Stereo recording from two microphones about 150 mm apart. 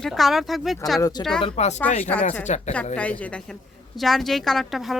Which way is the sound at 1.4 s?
40° left (ahead or behind).